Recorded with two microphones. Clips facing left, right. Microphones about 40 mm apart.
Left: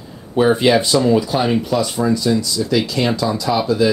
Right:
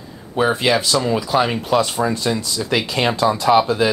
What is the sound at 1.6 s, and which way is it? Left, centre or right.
Speech, right.